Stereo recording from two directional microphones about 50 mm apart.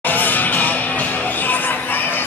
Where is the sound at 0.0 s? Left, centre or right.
Left.